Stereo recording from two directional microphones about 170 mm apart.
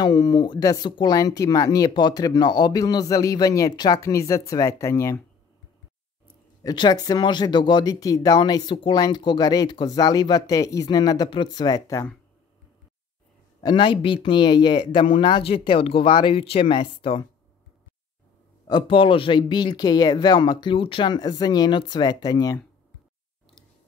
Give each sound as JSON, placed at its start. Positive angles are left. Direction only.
{"t": 0.0, "sound": "speech", "side_deg": 25}
{"t": 6.6, "sound": "speech", "side_deg": 25}
{"t": 13.6, "sound": "speech", "side_deg": 25}
{"t": 18.7, "sound": "speech", "side_deg": 30}